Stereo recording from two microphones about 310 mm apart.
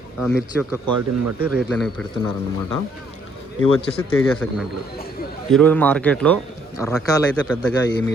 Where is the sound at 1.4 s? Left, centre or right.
Centre.